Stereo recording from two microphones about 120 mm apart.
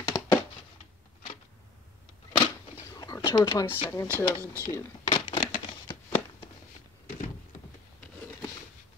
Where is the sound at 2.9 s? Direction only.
30° left (ahead or behind).